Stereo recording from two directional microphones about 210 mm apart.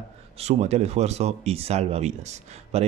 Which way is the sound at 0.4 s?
30° right (ahead or behind).